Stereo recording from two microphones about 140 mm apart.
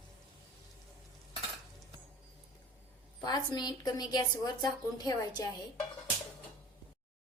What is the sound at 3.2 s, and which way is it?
A woman's voice, 30° left (ahead or behind).